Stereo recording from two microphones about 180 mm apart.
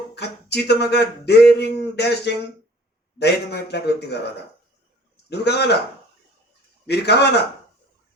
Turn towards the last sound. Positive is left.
turn(degrees=65)  # may be behind; listen again after turning